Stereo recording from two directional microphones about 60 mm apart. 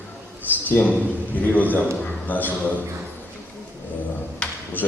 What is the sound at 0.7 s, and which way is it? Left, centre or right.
A man's voice, left.